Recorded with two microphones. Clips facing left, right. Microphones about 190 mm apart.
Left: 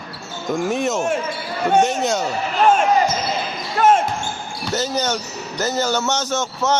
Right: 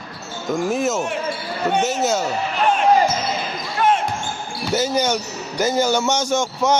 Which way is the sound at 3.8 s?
45° left (ahead or behind).